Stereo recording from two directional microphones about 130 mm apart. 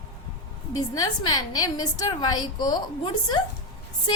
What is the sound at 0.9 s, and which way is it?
A woman's voice, 30° left (ahead or behind).